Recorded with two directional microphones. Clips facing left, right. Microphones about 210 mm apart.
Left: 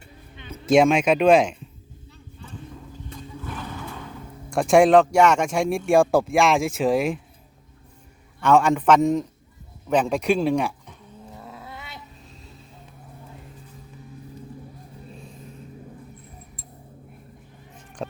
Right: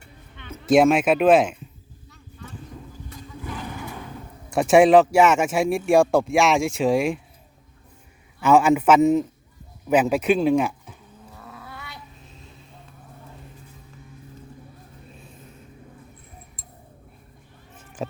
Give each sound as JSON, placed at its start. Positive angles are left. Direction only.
{"t": 0.6, "sound": "speech", "side_deg": 0}
{"t": 3.4, "sound": "a sound", "side_deg": -15}
{"t": 4.5, "sound": "speech", "side_deg": 0}
{"t": 8.4, "sound": "speech", "side_deg": -5}
{"t": 11.3, "sound": "cat", "side_deg": 25}